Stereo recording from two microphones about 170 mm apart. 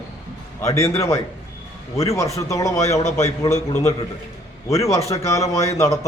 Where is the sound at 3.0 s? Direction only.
40° left (ahead or behind).